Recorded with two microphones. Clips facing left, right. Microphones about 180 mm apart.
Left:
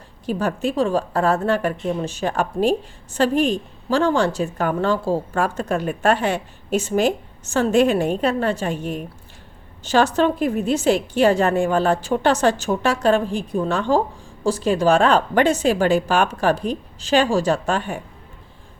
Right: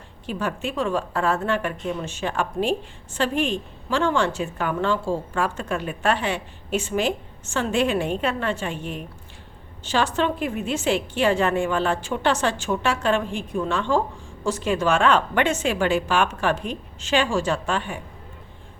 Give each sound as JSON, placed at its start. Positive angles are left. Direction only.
{"t": 0.3, "sound": "a woman's voice", "side_deg": 40}